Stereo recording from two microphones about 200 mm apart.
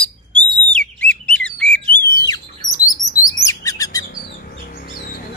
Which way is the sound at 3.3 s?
15° left (ahead or behind).